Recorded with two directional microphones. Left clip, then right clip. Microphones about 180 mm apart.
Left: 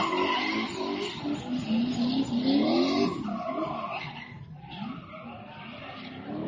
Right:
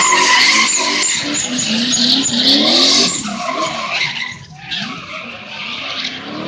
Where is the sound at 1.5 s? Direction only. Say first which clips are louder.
Right 16 dB; 15° right (ahead or behind).